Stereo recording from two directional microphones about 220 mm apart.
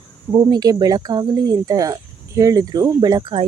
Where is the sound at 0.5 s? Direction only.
20° right (ahead or behind).